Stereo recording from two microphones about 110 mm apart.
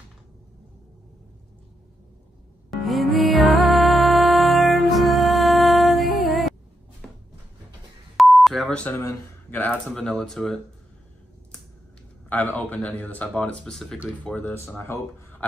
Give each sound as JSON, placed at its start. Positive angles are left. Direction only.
{"t": 2.7, "sound": "music", "side_deg": 0}
{"t": 7.0, "sound": "a sound", "side_deg": 5}
{"t": 8.2, "sound": "beep", "side_deg": 0}
{"t": 8.9, "sound": "speech", "side_deg": 20}
{"t": 12.3, "sound": "speech", "side_deg": 15}